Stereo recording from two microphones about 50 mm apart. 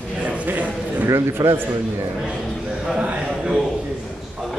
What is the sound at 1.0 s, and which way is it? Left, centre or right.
Speech, right.